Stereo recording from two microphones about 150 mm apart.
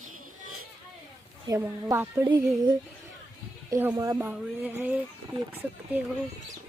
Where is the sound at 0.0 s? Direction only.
60° right (ahead or behind).